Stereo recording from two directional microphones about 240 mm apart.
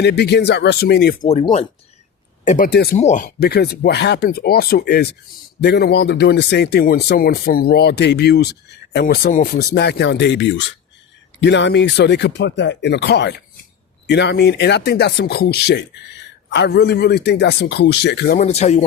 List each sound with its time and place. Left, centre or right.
0.0 s speech: left
1.3 s speech: left
3.0 s speech: left
18.3 s speech: left